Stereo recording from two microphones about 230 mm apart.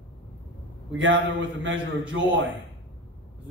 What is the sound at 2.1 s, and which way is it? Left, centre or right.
Speech, right.